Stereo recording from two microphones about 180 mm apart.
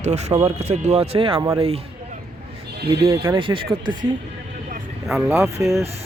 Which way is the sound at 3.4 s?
30° right (ahead or behind).